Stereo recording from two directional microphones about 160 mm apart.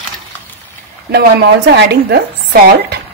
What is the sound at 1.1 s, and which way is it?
Speech, 90° right.